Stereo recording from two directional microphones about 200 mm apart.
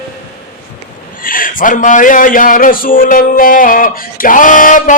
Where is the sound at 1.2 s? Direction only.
45° left (ahead or behind).